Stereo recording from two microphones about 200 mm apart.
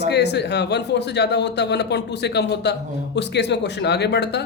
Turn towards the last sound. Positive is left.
turn(degrees=55)  # may be behind; listen again after turning